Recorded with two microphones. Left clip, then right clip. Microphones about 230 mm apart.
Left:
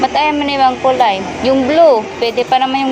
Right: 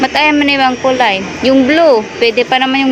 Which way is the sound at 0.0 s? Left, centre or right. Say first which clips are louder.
Right 3 dB; right.